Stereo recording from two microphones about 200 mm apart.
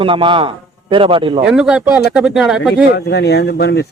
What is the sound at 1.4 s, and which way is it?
Speech, 5° right (ahead or behind).